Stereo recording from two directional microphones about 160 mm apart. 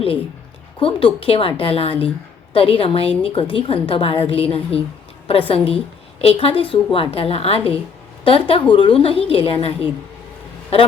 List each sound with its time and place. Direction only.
0.8 s a woman's voice: 35° left (ahead or behind)